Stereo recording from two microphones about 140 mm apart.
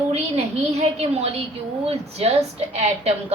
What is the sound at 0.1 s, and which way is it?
A woman's voice, 50° right (ahead or behind).